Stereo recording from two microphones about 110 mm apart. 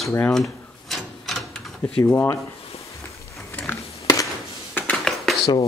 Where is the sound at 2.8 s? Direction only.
30° left (ahead or behind).